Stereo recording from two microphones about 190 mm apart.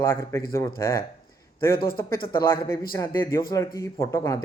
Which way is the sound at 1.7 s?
50° left (ahead or behind).